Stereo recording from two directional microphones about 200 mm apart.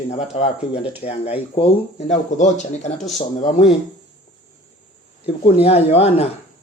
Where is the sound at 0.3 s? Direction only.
35° left (ahead or behind).